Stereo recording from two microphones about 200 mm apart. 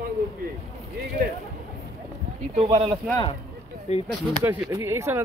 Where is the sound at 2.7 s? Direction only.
30° right (ahead or behind).